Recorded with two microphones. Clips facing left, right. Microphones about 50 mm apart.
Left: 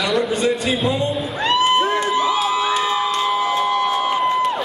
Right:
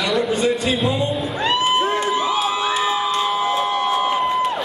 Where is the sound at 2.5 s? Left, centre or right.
Centre.